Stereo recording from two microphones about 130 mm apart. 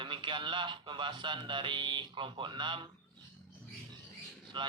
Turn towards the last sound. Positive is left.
turn(degrees=-40)  # may be behind; listen again after turning